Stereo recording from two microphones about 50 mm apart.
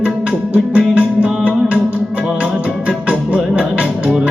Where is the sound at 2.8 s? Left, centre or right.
Right.